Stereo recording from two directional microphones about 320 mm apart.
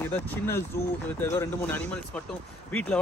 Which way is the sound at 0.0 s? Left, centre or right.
Centre.